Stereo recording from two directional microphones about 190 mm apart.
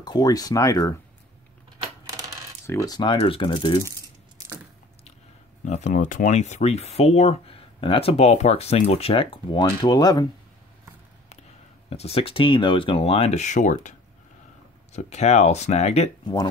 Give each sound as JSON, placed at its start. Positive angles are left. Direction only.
{"t": 0.0, "sound": "speech", "side_deg": 20}
{"t": 2.0, "sound": "coin", "side_deg": -20}
{"t": 2.6, "sound": "speech", "side_deg": 15}
{"t": 5.7, "sound": "speech", "side_deg": 40}
{"t": 11.9, "sound": "speech", "side_deg": 30}
{"t": 16.3, "sound": "speech", "side_deg": 25}